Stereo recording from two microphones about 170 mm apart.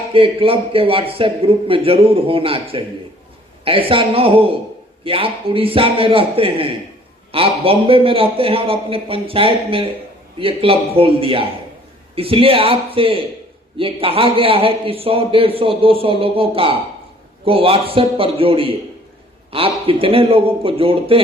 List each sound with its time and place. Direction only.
0.1 s a man's voice: 35° right (ahead or behind)